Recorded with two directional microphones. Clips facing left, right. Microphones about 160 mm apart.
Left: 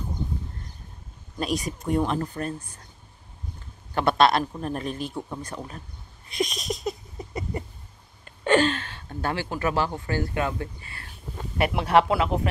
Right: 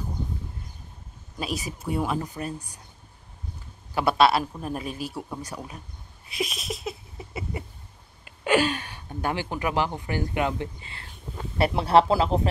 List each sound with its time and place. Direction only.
1.4 s speech: 5° right (ahead or behind)
3.9 s a man's voice: 5° right (ahead or behind)
6.2 s a sound: 5° right (ahead or behind)
8.3 s speech: 10° right (ahead or behind); by 12.4 s 30° right (ahead or behind)